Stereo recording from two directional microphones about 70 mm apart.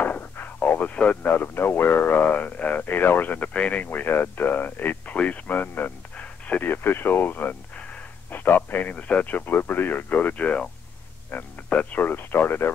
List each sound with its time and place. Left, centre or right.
0.0 s artillery fire: left
1.3 s speech: left